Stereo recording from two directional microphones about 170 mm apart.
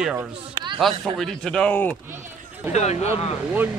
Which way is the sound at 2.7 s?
40° left (ahead or behind).